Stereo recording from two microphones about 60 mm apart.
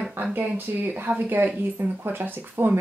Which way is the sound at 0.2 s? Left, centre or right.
Right.